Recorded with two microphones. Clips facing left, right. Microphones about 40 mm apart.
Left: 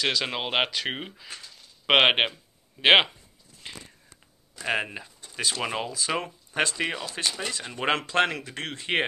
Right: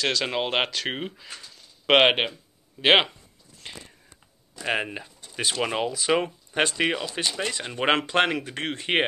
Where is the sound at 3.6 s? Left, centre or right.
Centre.